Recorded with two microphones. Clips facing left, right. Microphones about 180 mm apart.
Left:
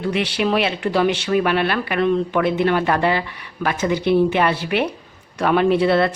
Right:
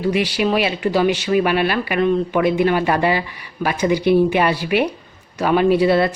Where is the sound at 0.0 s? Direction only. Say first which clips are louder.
Right 2 dB; 5° right (ahead or behind).